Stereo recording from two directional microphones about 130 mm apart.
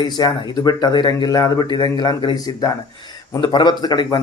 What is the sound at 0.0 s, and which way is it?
Speech, 30° left (ahead or behind).